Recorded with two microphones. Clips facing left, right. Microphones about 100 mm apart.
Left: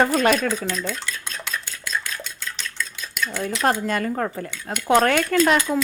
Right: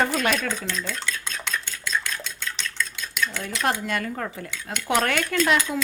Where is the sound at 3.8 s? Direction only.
40° left (ahead or behind).